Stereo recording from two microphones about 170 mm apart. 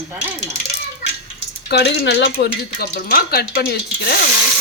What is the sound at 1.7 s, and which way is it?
Speech, 85° left.